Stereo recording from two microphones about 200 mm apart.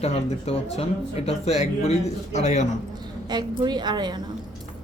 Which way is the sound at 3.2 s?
20° right (ahead or behind).